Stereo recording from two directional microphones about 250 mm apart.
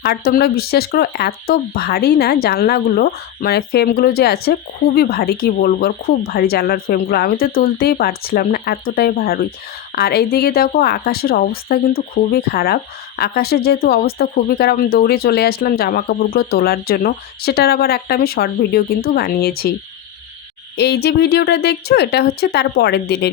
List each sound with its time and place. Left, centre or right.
0.0 s speech: left
20.7 s speech: left